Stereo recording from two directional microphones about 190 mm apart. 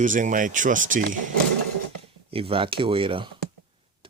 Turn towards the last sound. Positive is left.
turn(degrees=-25)  # may be behind; listen again after turning